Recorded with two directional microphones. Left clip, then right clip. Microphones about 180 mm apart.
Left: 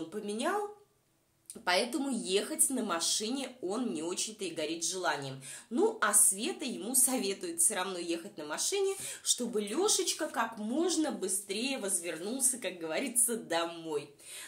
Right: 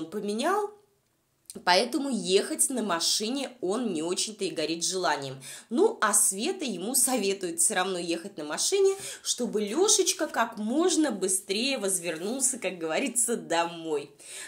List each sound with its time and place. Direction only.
0.1 s speech: 40° right (ahead or behind)
1.6 s speech: 40° right (ahead or behind)